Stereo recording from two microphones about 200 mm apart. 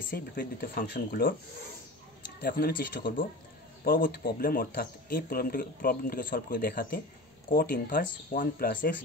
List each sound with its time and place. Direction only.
0.1 s speech: 45° left (ahead or behind)
2.4 s speech: 50° left (ahead or behind)